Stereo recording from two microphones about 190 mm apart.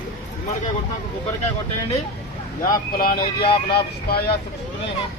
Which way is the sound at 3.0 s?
50° left (ahead or behind).